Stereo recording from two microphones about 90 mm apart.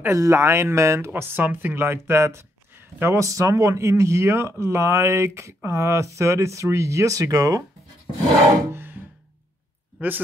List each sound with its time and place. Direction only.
0.0 s speech: 30° right (ahead or behind)
9.9 s speech: 20° right (ahead or behind)